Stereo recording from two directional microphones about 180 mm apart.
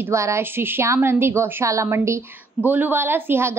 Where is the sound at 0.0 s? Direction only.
15° right (ahead or behind).